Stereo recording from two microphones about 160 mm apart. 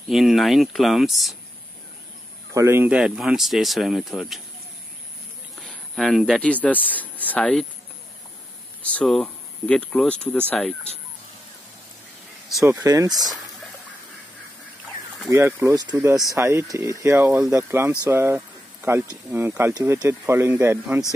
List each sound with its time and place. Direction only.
0.1 s speech: centre (ahead or behind)
2.5 s speech: 15° right (ahead or behind)
5.6 s speech: 5° left (ahead or behind)
8.8 s speech: 5° left (ahead or behind)
12.6 s speech: 20° right (ahead or behind)
15.2 s a man's voice: 15° right (ahead or behind)